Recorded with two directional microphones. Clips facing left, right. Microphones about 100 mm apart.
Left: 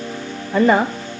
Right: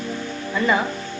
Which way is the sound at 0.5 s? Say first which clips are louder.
Left 6 dB; 45° left (ahead or behind).